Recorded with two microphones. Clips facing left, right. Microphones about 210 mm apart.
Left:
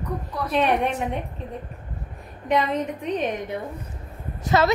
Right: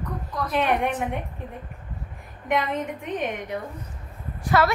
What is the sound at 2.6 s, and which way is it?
A woman's voice, 20° left (ahead or behind).